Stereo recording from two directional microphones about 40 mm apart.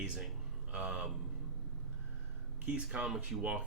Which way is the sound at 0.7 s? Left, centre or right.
Right.